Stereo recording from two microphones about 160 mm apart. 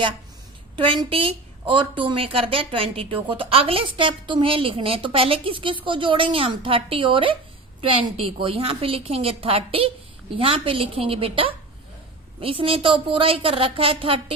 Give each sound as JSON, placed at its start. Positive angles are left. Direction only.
{"t": 0.8, "sound": "a woman's voice", "side_deg": -30}